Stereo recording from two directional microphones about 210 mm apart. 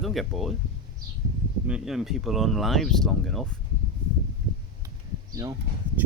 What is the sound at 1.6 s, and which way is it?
Speech, 5° right (ahead or behind).